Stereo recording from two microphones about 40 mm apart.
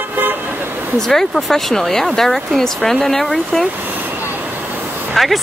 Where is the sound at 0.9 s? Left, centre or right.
Centre.